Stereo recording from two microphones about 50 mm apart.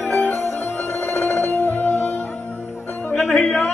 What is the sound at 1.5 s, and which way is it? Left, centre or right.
Music, left.